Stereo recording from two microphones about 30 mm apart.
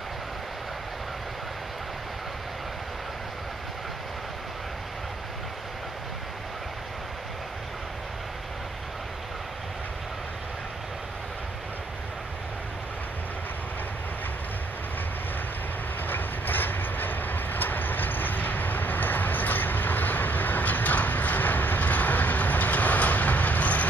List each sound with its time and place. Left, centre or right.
16.1 s train: left